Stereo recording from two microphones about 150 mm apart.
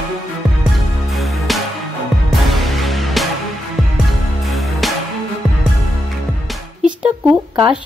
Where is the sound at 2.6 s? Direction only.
Centre (ahead or behind).